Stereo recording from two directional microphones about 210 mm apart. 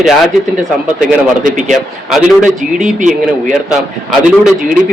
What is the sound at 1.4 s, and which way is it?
Speech, 35° right (ahead or behind).